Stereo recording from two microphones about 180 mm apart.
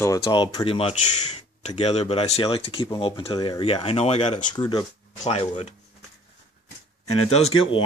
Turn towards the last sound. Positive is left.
turn(degrees=30)  # may be behind; listen again after turning